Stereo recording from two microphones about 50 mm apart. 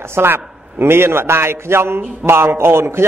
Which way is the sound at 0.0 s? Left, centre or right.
Right.